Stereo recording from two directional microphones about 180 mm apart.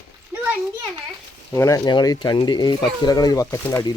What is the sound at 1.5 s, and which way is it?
Speech, 15° left (ahead or behind).